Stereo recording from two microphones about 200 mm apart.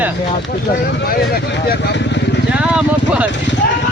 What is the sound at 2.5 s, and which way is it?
Speech, 5° right (ahead or behind).